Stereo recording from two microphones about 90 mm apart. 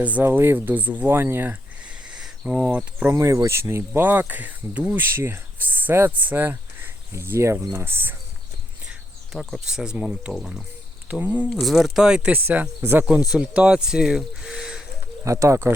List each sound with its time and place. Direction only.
0.0 s speech: 15° right (ahead or behind)
0.3 s speech: 25° right (ahead or behind)
2.5 s speech: 15° right (ahead or behind)
3.1 s speech: 35° right (ahead or behind)
8.9 s speech: 5° right (ahead or behind)
11.1 s speech: 15° right (ahead or behind)
11.6 s speech: 5° right (ahead or behind)
12.5 s speech: 25° right (ahead or behind)
13.3 s speech: 10° right (ahead or behind)
15.2 s speech: 35° right (ahead or behind)